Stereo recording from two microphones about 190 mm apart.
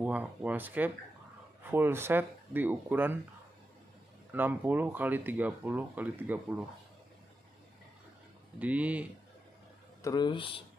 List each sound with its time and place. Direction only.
0.0 s speech: 10° right (ahead or behind)
4.3 s speech: 10° right (ahead or behind)
8.5 s speech: 5° right (ahead or behind)
10.0 s speech: 25° left (ahead or behind)